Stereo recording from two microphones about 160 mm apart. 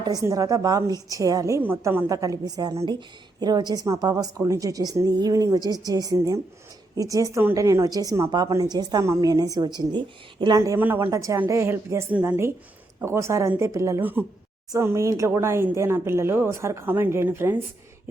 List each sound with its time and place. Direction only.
0.0 s a woman's voice: 25° right (ahead or behind)
10.6 s speech: 15° right (ahead or behind)